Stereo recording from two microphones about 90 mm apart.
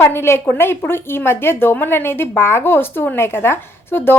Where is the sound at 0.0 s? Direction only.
30° left (ahead or behind).